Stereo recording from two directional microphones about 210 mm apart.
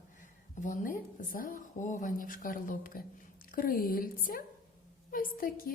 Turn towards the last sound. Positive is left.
turn(degrees=45)  # may be behind; listen again after turning